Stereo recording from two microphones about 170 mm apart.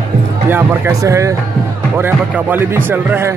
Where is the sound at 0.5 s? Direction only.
15° right (ahead or behind).